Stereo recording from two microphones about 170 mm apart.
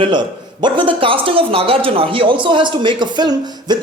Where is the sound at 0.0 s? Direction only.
25° right (ahead or behind).